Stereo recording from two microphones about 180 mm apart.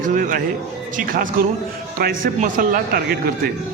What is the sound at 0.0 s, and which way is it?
Music, 45° right (ahead or behind).